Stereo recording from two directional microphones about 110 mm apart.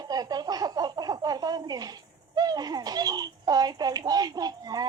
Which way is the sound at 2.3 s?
35° right (ahead or behind).